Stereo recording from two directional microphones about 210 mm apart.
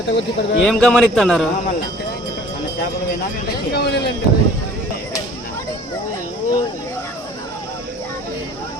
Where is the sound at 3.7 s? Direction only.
50° left (ahead or behind).